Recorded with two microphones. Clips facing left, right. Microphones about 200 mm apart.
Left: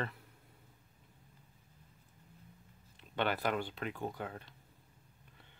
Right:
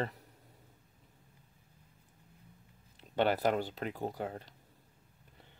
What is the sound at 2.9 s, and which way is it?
Speech, 40° right (ahead or behind).